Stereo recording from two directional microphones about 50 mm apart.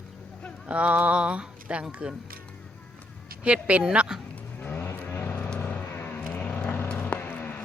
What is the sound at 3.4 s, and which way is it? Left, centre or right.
Speech, right.